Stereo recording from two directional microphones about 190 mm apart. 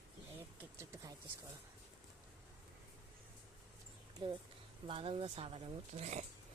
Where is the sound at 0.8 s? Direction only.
15° right (ahead or behind).